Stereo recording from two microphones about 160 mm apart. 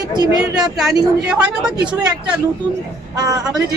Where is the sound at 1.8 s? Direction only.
25° right (ahead or behind).